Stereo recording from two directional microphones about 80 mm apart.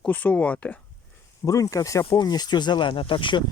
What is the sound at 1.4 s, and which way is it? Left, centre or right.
Speech, left.